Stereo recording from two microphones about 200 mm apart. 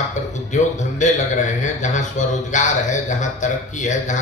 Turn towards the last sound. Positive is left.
turn(degrees=40)  # may be behind; listen again after turning